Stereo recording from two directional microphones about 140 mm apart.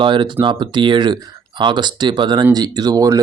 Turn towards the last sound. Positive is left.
turn(degrees=-25)  # may be behind; listen again after turning